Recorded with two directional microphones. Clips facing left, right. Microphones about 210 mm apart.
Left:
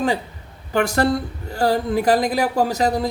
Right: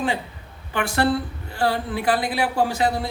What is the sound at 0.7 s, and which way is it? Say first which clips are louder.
A man's voice: left 3 dB; 40° left (ahead or behind).